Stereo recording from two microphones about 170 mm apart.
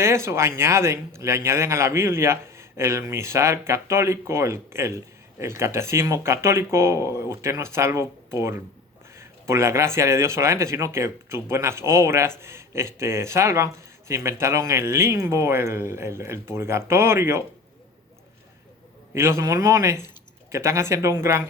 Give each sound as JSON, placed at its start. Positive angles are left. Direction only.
{"t": 0.0, "sound": "a man's voice", "side_deg": -15}
{"t": 19.1, "sound": "a man's voice", "side_deg": -15}